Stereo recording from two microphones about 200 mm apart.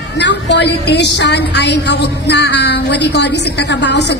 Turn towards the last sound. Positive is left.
turn(degrees=60)  # may be behind; listen again after turning